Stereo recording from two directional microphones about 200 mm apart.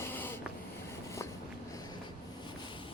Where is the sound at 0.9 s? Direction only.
15° left (ahead or behind).